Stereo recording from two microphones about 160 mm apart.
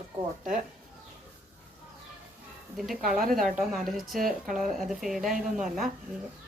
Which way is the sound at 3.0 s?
60° right (ahead or behind).